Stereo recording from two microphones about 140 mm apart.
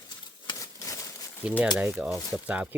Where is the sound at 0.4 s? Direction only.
25° left (ahead or behind).